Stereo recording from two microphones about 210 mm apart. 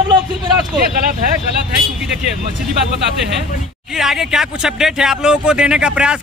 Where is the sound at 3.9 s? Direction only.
Centre (ahead or behind).